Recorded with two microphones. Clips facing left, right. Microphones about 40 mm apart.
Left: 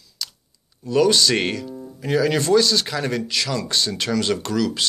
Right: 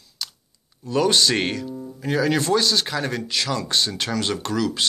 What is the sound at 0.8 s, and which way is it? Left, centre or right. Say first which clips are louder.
Speech: left 2 dB; centre.